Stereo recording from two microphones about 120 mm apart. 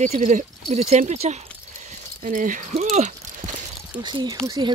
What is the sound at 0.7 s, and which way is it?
Speech, 65° right (ahead or behind).